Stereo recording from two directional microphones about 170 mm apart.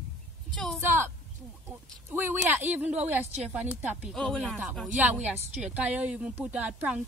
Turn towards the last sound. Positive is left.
turn(degrees=-10)  # may be behind; listen again after turning